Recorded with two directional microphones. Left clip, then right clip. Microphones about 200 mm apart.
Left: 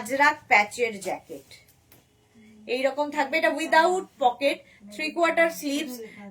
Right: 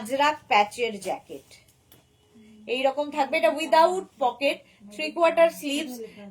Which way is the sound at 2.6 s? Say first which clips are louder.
Right 1 dB; 15° left (ahead or behind).